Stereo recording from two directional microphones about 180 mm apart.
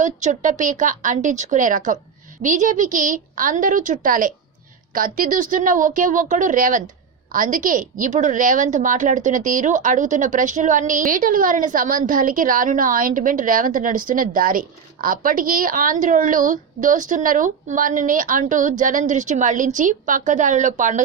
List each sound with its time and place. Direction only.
0.0 s a woman's voice: 45° right (ahead or behind)